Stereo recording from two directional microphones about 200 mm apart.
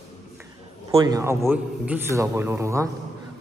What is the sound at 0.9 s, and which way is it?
A man's voice, 15° right (ahead or behind).